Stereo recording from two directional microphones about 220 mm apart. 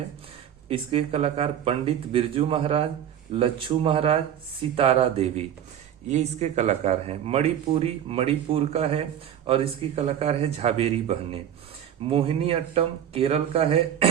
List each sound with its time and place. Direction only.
0.7 s speech: 25° right (ahead or behind)